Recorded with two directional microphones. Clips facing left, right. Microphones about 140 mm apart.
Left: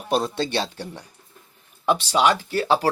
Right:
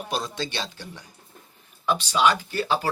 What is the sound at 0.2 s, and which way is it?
Speech, 30° left (ahead or behind).